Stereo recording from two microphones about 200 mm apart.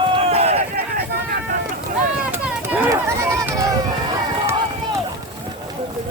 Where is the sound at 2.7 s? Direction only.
10° right (ahead or behind).